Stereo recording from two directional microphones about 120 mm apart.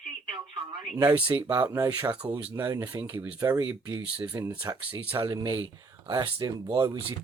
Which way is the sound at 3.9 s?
10° right (ahead or behind).